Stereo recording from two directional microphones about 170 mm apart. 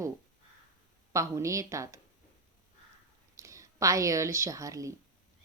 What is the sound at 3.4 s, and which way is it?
Speech, 20° right (ahead or behind).